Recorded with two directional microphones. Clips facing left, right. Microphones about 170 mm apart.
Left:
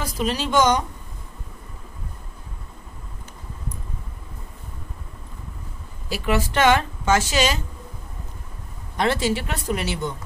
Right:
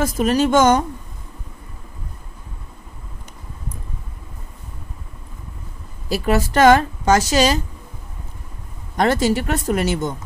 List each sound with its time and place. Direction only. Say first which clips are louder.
0.0 s speech: right 8 dB; 50° right (ahead or behind)
6.0 s speech: right 4 dB; 40° right (ahead or behind)
8.9 s speech: right 5 dB; 45° right (ahead or behind)